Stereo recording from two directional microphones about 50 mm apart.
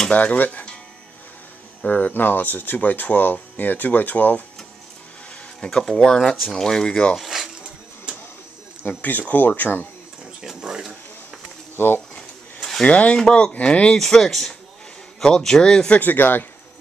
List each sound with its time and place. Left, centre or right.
0.1 s speech: left
1.9 s speech: left
5.6 s speech: centre
7.2 s a sound: centre
8.8 s speech: left
10.6 s a sound: centre
11.7 s speech: left
12.8 s speech: left
13.9 s speech: centre
16.0 s speech: left